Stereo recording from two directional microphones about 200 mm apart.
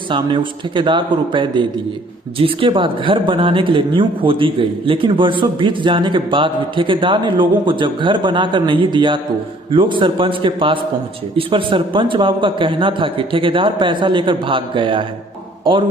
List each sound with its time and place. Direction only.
0.1 s speech: 25° right (ahead or behind)